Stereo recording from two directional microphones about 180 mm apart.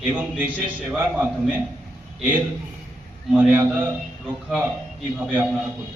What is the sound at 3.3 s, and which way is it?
Speech, 5° right (ahead or behind).